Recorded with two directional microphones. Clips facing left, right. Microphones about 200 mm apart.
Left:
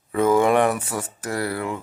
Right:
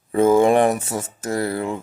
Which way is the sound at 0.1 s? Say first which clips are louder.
Right 3 dB; 25° right (ahead or behind).